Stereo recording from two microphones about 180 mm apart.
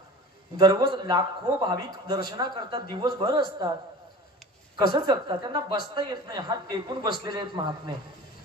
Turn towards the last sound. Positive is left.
turn(degrees=-25)  # may be behind; listen again after turning